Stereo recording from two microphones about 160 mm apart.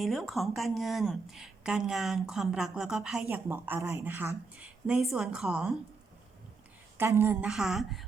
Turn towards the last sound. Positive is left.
turn(degrees=0)  # may be behind; listen again after turning